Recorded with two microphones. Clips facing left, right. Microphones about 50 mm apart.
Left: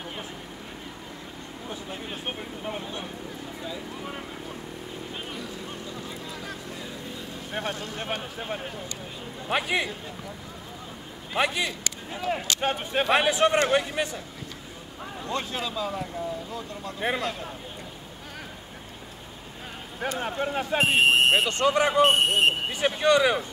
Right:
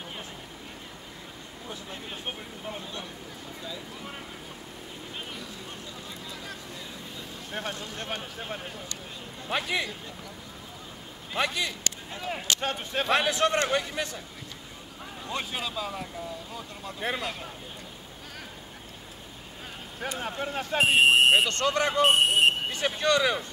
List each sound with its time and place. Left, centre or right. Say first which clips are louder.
1.7 s a sound: left 3 dB; centre
2.2 s vehicle: left 4 dB; left
7.6 s speech: left 3 dB; left
9.5 s speech: left 3 dB; left
11.3 s speech: left 3 dB; left
12.1 s speech: left 7 dB; centre
12.5 s speech: left 4 dB; left
15.2 s speech: left 2 dB; centre
17.0 s speech: left 3 dB; centre
20.2 s speech: left 4 dB; centre
20.8 s speech: right 1 dB; centre
21.5 s speech: left 4 dB; centre
22.0 s speech: right 3 dB; centre
22.7 s speech: left 4 dB; centre